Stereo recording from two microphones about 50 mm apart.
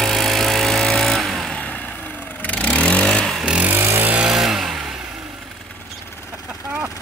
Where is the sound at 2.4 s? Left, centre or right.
Left.